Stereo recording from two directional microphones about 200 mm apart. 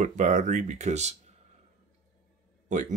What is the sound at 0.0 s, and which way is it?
Speech, 35° right (ahead or behind).